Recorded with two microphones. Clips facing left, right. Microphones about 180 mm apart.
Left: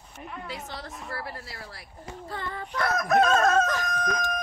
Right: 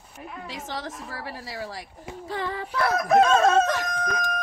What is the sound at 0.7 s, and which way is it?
Speech, 90° right.